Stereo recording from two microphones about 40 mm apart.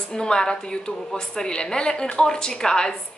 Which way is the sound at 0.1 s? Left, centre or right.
Centre.